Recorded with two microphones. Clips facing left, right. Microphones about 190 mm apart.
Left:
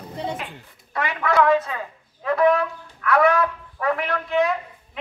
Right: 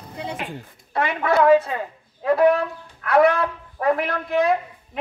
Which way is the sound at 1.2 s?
30° right (ahead or behind).